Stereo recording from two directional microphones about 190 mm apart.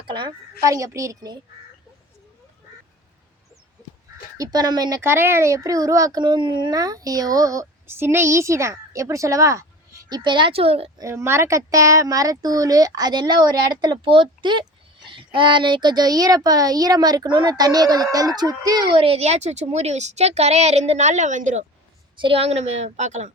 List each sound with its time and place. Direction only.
0.1 s a child's voice: 25° right (ahead or behind)
4.4 s a child's voice: 20° right (ahead or behind)
11.0 s a child's voice: 15° right (ahead or behind); by 21.6 s 40° right (ahead or behind)
22.2 s a woman's voice: 30° right (ahead or behind)